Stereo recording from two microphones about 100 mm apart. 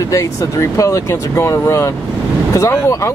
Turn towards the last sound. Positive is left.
turn(degrees=30)  # may be behind; listen again after turning